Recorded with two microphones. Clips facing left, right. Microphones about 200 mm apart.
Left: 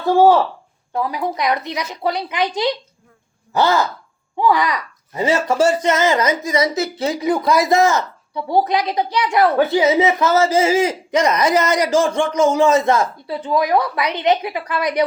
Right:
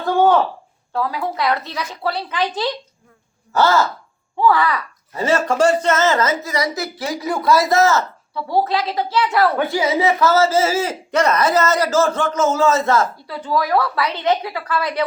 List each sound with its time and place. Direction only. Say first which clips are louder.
0.9 s speech: left 1 dB; 20° left (ahead or behind)